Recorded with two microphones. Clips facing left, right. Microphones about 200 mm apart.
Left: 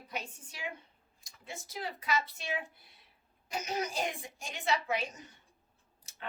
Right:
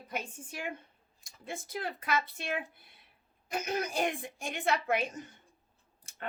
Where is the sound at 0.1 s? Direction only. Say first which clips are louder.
Right 3 dB; 50° right (ahead or behind).